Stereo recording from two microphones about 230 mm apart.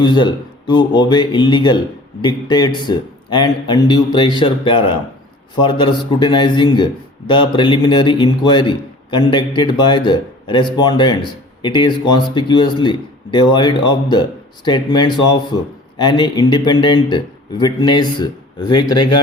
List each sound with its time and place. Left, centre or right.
0.0 s a man's voice: centre